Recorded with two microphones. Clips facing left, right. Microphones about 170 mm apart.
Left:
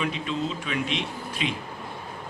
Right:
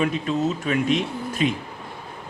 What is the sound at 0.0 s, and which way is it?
Speech, 45° right (ahead or behind).